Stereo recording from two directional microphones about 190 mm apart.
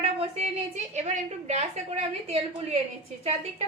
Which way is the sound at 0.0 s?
35° right (ahead or behind).